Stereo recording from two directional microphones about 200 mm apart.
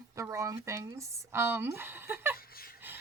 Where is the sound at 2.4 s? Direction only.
50° left (ahead or behind).